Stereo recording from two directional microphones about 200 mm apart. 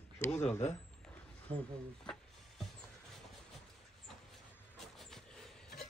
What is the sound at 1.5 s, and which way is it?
Speech, 25° right (ahead or behind).